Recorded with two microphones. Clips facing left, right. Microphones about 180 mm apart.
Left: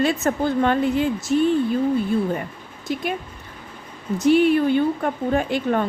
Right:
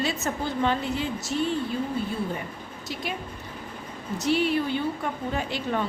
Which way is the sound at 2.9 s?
55° left (ahead or behind).